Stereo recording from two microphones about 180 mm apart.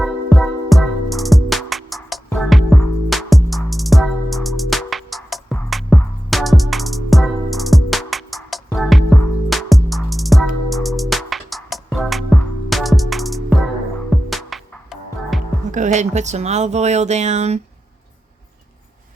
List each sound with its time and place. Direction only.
0.0 s music: centre (ahead or behind)
15.7 s speech: 40° right (ahead or behind)